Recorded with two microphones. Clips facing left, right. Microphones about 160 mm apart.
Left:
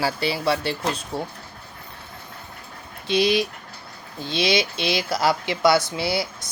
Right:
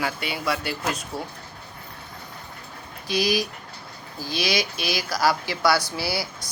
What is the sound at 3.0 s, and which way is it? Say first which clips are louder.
Speech: left 4 dB; 25° left (ahead or behind).